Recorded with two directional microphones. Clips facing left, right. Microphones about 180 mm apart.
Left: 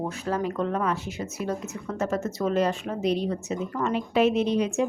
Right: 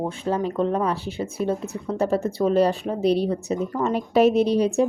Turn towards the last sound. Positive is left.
turn(degrees=-35)  # may be behind; listen again after turning